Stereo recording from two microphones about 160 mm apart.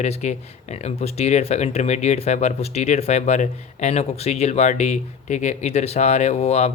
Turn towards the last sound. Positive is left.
turn(degrees=45)  # may be behind; listen again after turning